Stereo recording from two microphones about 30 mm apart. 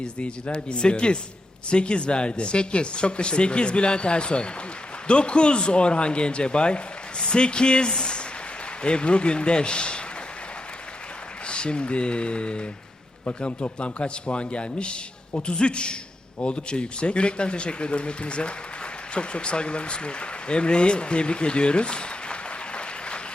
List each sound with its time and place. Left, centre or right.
0.0 s speech: left
11.4 s speech: left